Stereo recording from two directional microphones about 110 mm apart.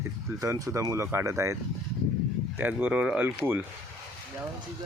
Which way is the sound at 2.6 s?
15° right (ahead or behind).